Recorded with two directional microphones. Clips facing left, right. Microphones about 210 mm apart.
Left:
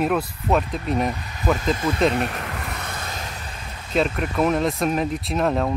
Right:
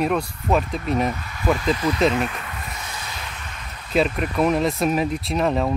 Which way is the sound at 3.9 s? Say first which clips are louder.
Right 1 dB; 5° right (ahead or behind).